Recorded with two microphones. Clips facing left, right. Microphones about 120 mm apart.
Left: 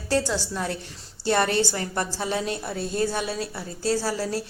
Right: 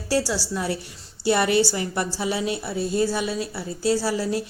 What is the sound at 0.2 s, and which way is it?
A woman's voice, 10° right (ahead or behind).